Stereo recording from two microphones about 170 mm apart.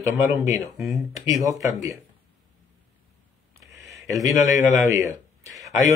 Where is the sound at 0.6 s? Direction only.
Centre (ahead or behind).